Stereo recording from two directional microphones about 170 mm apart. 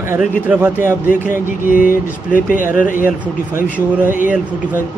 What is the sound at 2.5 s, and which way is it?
Speech, 50° left (ahead or behind).